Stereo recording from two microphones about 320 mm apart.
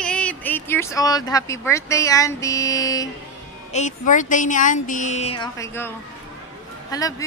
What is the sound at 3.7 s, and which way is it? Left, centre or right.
Speech, left.